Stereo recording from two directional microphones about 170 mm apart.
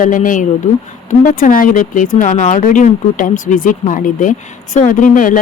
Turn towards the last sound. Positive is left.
turn(degrees=50)  # may be behind; listen again after turning